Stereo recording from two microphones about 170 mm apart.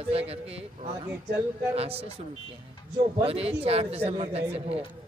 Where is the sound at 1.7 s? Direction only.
35° right (ahead or behind).